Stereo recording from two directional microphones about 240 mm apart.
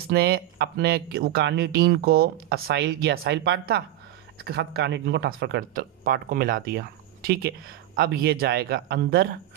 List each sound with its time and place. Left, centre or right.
0.1 s speech: right